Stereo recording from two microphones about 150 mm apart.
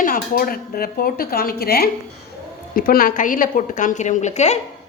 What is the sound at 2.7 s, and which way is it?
A woman's voice, 75° left (ahead or behind).